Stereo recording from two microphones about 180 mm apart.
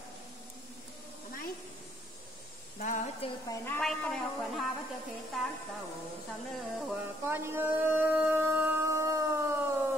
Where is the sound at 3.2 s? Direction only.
30° left (ahead or behind).